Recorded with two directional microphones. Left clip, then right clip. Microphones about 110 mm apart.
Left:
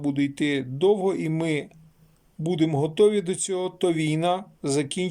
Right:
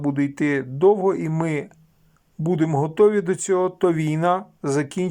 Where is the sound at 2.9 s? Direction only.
35° left (ahead or behind).